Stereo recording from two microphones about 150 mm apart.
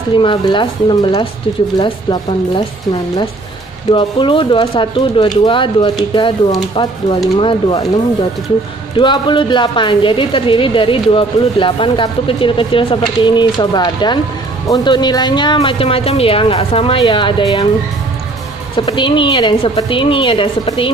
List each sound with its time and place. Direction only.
0.2 s a woman's voice: 35° left (ahead or behind)
3.9 s a woman's voice: 35° left (ahead or behind)
8.9 s a woman's voice: 30° left (ahead or behind)
18.8 s a woman's voice: 35° left (ahead or behind)